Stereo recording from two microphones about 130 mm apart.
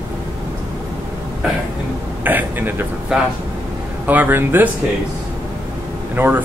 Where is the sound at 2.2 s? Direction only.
15° right (ahead or behind).